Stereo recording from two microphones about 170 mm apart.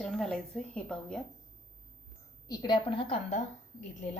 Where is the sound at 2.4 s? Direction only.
25° left (ahead or behind).